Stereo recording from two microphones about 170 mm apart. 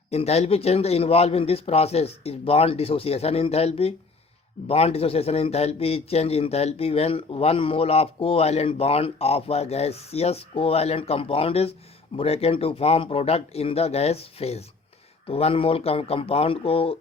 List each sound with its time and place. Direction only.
0.1 s speech: 40° left (ahead or behind)